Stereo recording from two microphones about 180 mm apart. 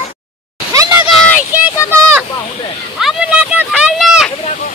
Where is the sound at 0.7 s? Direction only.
20° right (ahead or behind).